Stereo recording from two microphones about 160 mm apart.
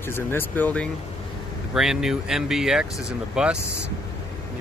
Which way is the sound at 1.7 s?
Centre (ahead or behind).